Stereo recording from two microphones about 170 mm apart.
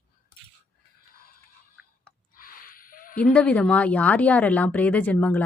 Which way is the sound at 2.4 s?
55° left (ahead or behind).